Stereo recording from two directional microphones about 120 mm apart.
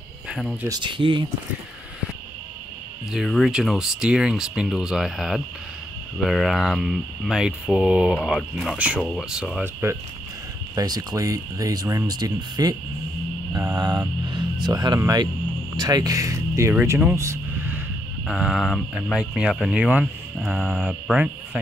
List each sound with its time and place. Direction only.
0.3 s speech: centre (ahead or behind)
0.8 s speech: 45° right (ahead or behind)
3.1 s speech: centre (ahead or behind)
8.7 s speech: 10° right (ahead or behind)
10.7 s speech: 30° right (ahead or behind)
18.2 s speech: 5° right (ahead or behind)
20.7 s speech: centre (ahead or behind)